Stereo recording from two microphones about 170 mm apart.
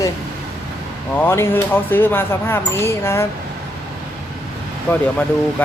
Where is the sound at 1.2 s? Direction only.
15° left (ahead or behind).